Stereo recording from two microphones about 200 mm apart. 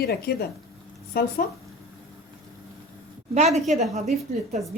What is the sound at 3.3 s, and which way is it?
Speech, 35° right (ahead or behind).